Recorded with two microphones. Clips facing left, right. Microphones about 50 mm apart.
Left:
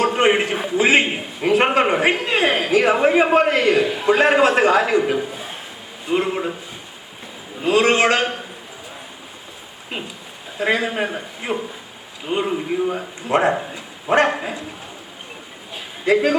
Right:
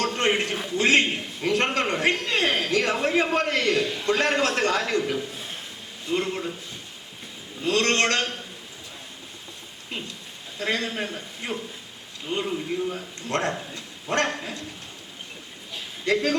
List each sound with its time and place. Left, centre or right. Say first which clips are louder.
0.0 s a man's voice: left 7 dB; centre
5.0 s a man's voice: left 7 dB; left
5.3 s a sound: left 5 dB; centre
6.1 s a man's voice: left 6 dB; centre
7.6 s a man's voice: left 7 dB; centre
10.6 s a man's voice: left 7 dB; centre
13.2 s a man's voice: left 9 dB; centre
16.0 s a man's voice: left 7 dB; centre